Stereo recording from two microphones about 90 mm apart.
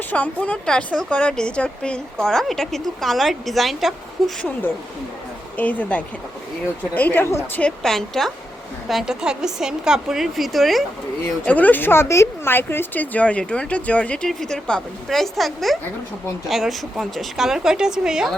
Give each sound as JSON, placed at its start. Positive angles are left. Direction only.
{"t": 0.1, "sound": "a woman's voice", "side_deg": 15}
{"t": 5.5, "sound": "speech", "side_deg": 15}
{"t": 7.6, "sound": "a woman's voice", "side_deg": 5}
{"t": 11.4, "sound": "speech", "side_deg": 15}